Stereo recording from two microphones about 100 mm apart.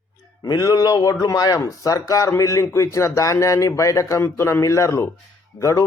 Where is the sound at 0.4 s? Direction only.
40° left (ahead or behind).